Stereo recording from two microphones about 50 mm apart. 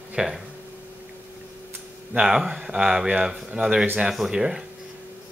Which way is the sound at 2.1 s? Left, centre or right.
Centre.